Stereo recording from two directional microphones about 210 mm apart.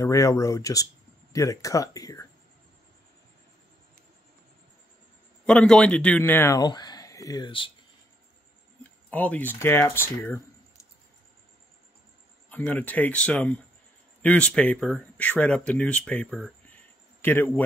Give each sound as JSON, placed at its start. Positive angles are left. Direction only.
{"t": 0.0, "sound": "speech", "side_deg": 15}
{"t": 5.4, "sound": "a man's voice", "side_deg": 5}
{"t": 9.1, "sound": "speech", "side_deg": 5}
{"t": 12.4, "sound": "speech", "side_deg": 5}